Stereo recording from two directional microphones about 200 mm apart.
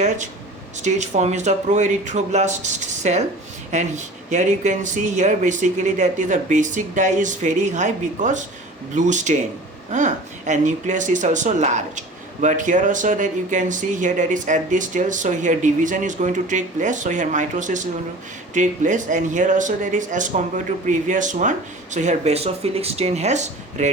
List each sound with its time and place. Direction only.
0.8 s speech: 35° right (ahead or behind)